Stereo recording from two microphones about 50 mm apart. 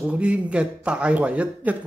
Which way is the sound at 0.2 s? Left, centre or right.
Right.